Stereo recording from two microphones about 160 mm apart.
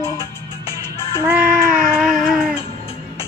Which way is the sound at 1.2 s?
10° right (ahead or behind).